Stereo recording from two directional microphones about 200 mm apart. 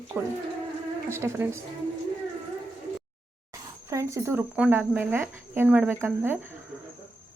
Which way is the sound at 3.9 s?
15° right (ahead or behind).